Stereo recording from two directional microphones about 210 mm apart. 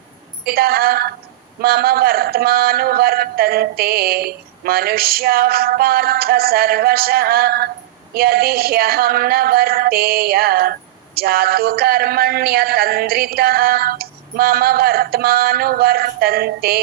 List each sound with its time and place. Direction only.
0.4 s a woman's voice: 45° right (ahead or behind)